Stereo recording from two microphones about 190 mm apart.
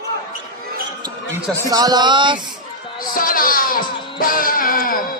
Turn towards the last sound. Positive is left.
turn(degrees=50)  # may be behind; listen again after turning